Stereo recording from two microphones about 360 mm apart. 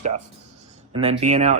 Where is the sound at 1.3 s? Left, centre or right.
Centre.